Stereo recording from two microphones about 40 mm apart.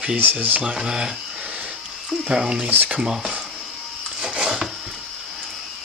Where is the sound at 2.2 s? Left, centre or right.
Centre.